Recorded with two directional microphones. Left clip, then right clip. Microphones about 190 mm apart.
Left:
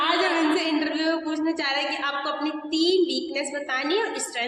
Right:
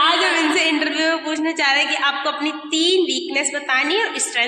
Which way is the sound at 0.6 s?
15° right (ahead or behind).